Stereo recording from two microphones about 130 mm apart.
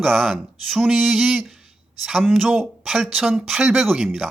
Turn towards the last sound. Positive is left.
turn(degrees=0)  # may be behind; listen again after turning